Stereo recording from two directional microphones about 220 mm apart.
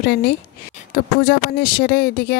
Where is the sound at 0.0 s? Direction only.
45° left (ahead or behind).